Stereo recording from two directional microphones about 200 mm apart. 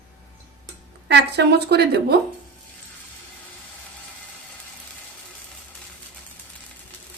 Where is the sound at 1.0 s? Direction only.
55° right (ahead or behind).